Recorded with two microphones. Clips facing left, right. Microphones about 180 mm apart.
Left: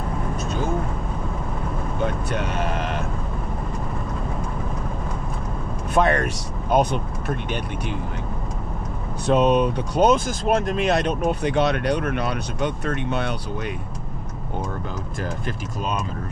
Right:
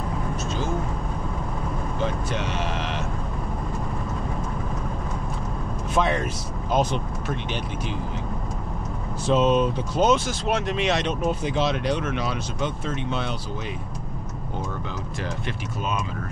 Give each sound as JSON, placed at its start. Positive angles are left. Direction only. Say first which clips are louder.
{"t": 2.0, "sound": "vehicle", "louder": "left 3 dB", "side_deg": 55}
{"t": 5.9, "sound": "speech", "louder": "left 4 dB", "side_deg": 60}
{"t": 9.2, "sound": "speech", "louder": "left 2 dB", "side_deg": 60}